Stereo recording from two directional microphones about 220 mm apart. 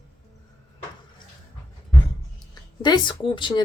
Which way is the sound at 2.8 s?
20° left (ahead or behind).